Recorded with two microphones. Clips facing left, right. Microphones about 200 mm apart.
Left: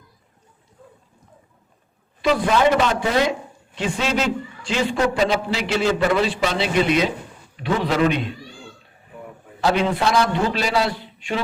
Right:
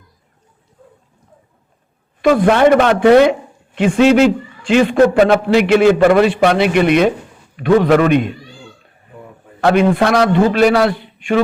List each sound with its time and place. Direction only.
2.2 s a man's voice: 55° right (ahead or behind)
9.6 s a man's voice: 55° right (ahead or behind)